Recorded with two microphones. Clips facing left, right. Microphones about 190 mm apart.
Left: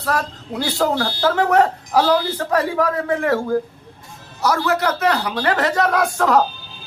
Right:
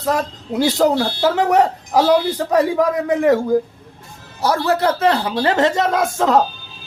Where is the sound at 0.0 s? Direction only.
20° right (ahead or behind).